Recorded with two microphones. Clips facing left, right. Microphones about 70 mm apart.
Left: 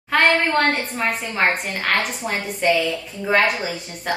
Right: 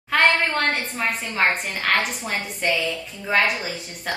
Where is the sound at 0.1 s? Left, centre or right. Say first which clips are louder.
Left 2 dB; centre.